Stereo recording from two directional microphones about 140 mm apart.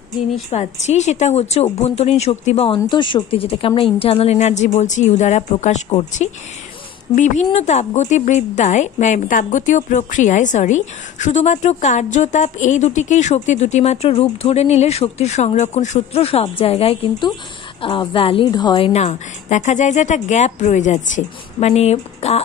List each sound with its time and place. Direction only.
0.5 s a woman's voice: 55° left (ahead or behind); by 18.9 s 30° left (ahead or behind)
18.9 s a woman's voice: 55° left (ahead or behind)